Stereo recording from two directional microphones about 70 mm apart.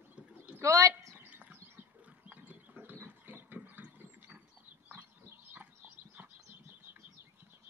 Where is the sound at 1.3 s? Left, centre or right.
Right.